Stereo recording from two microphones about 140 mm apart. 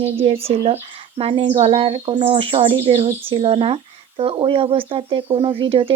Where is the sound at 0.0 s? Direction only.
45° right (ahead or behind).